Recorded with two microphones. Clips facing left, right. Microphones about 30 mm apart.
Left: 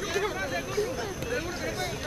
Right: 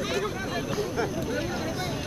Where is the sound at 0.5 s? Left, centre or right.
Centre.